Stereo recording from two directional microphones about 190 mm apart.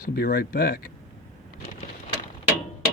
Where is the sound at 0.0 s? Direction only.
50° left (ahead or behind).